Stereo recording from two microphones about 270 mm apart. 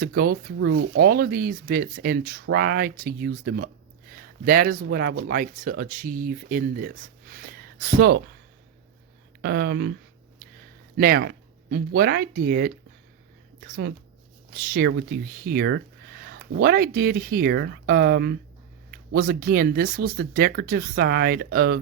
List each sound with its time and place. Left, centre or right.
0.0 s speech: right
9.4 s speech: right
10.9 s speech: right